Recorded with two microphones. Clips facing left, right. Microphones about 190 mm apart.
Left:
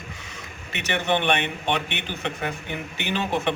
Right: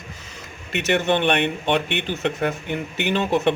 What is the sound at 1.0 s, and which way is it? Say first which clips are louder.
Speech: even; 50° right (ahead or behind).